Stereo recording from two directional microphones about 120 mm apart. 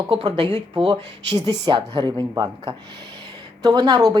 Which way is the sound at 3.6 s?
35° right (ahead or behind).